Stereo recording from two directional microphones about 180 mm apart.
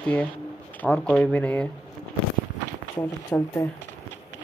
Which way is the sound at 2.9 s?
15° left (ahead or behind).